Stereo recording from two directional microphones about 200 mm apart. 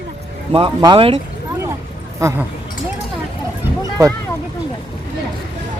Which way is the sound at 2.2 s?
15° right (ahead or behind).